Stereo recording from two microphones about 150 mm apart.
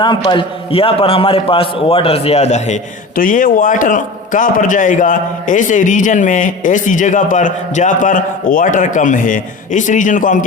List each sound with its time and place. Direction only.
0.0 s a man's voice: 30° left (ahead or behind); by 2.7 s 45° left (ahead or behind)
3.2 s a man's voice: 65° left (ahead or behind)